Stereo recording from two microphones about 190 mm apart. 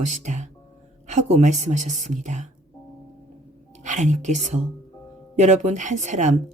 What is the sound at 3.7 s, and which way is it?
A woman's voice, 40° right (ahead or behind).